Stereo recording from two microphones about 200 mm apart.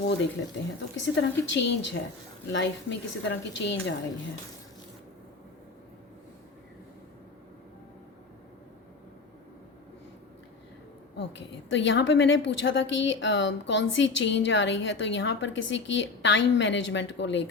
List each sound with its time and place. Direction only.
0.9 s a woman's voice: 65° left (ahead or behind)
11.2 s a woman's voice: 65° left (ahead or behind)